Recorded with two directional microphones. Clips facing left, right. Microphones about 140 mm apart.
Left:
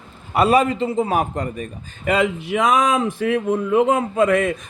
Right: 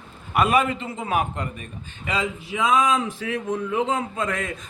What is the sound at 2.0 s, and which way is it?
Speech, 65° left (ahead or behind).